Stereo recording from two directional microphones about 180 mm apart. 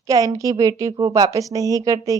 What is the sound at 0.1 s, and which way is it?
A woman's voice, 20° right (ahead or behind).